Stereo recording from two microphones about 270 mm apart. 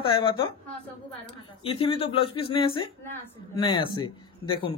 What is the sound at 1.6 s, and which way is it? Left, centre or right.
Speech, centre.